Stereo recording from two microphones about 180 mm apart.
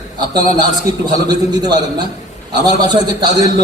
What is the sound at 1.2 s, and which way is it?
A man's voice, 25° right (ahead or behind).